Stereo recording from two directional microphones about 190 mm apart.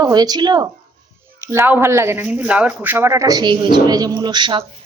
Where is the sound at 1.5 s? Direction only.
10° right (ahead or behind).